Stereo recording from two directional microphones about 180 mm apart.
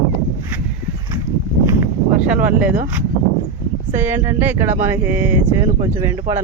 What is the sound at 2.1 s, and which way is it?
Speech, 5° right (ahead or behind).